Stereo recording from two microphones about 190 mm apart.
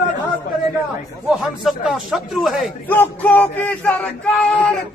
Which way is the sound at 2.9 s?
10° left (ahead or behind).